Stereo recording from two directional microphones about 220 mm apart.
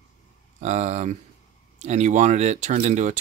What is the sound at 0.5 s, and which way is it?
Speech, 30° right (ahead or behind).